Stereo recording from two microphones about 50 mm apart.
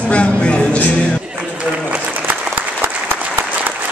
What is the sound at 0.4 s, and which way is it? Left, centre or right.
Music, left.